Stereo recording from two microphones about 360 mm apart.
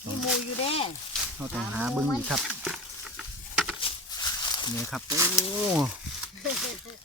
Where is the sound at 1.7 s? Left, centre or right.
Centre.